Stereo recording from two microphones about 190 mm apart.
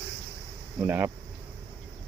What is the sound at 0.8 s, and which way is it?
Speech, 10° right (ahead or behind).